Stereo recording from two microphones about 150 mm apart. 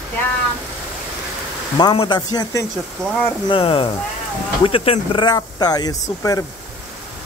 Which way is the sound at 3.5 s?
35° left (ahead or behind).